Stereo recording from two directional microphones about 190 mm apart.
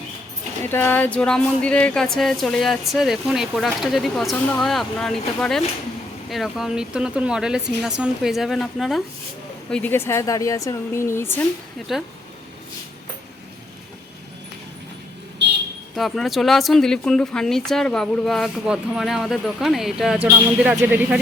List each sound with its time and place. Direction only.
0.6 s speech: 10° left (ahead or behind)
11.9 s speech: centre (ahead or behind)
15.4 s vehicle: 65° right (ahead or behind)
16.0 s speech: centre (ahead or behind)